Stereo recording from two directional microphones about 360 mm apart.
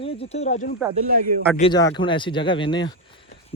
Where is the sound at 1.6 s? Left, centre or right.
Centre.